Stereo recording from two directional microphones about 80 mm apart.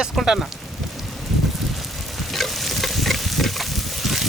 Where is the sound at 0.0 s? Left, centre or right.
Centre.